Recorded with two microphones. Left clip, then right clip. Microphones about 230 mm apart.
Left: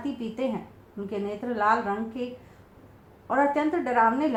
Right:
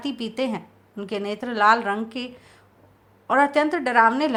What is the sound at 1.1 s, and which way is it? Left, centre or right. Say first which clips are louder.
Speech: right 3 dB; right.